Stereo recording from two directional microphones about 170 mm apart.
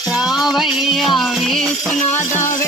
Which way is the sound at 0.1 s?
5° right (ahead or behind).